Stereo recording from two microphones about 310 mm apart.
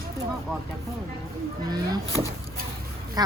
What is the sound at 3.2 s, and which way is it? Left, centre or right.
Speech, centre.